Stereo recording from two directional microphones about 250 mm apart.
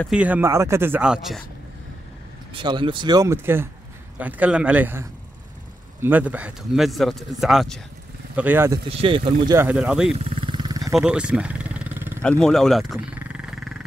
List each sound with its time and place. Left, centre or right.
0.0 s speech: centre
2.5 s speech: centre
8.8 s speech: right
9.7 s speech: centre
10.1 s vehicle: right
10.8 s vehicle: centre
12.2 s wild animals: centre